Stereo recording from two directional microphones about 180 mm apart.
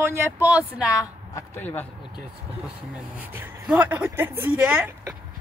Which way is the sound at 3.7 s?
10° right (ahead or behind).